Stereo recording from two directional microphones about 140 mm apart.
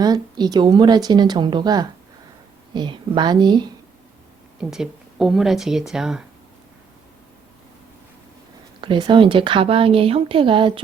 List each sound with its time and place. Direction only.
0.0 s a woman's voice: 30° right (ahead or behind)
4.7 s speech: 5° right (ahead or behind)
8.8 s speech: 35° right (ahead or behind)